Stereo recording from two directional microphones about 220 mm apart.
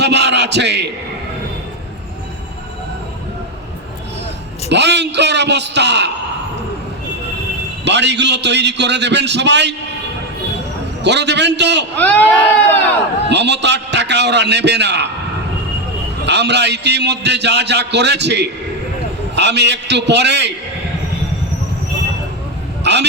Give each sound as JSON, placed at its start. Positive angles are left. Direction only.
{"t": 0.0, "sound": "a man's voice", "side_deg": -50}
{"t": 4.7, "sound": "a man's voice", "side_deg": -50}
{"t": 7.9, "sound": "a man's voice", "side_deg": -50}
{"t": 11.0, "sound": "a man's voice", "side_deg": -50}
{"t": 11.9, "sound": "speech", "side_deg": 5}
{"t": 13.3, "sound": "a man's voice", "side_deg": -50}
{"t": 16.2, "sound": "a man's voice", "side_deg": -50}
{"t": 22.8, "sound": "speech", "side_deg": -50}